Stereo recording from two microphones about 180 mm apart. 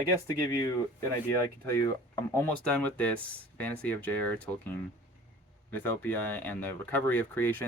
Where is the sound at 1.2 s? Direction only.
15° left (ahead or behind).